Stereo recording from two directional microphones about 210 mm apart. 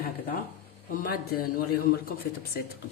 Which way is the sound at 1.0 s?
45° left (ahead or behind).